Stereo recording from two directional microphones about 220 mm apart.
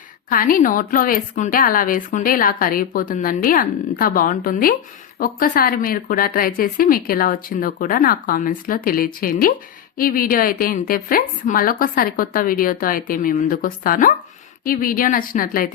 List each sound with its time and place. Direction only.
0.3 s speech: 40° left (ahead or behind)